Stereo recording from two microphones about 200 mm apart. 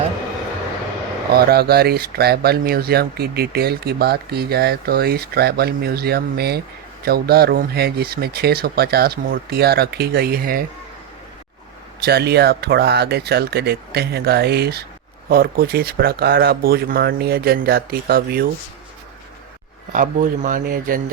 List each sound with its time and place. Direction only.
1.4 s speech: 50° right (ahead or behind)
12.0 s speech: 55° right (ahead or behind)
19.9 s speech: 40° right (ahead or behind)